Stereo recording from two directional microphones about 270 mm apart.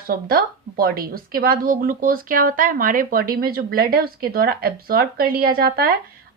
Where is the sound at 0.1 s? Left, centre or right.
Right.